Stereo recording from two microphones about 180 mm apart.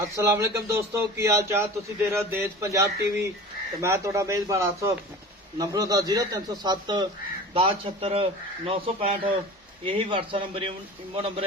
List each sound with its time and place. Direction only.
0.0 s a man's voice: 15° right (ahead or behind); by 11.4 s 35° right (ahead or behind)